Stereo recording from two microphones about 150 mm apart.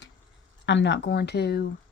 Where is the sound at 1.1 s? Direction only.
90° left.